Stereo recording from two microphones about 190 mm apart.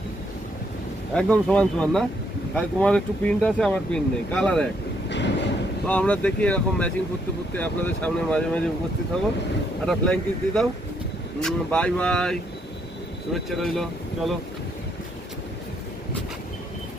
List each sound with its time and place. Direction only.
1.1 s speech: 5° left (ahead or behind)
5.0 s vehicle: 65° left (ahead or behind)
5.9 s speech: 5° left (ahead or behind)
9.8 s speech: centre (ahead or behind)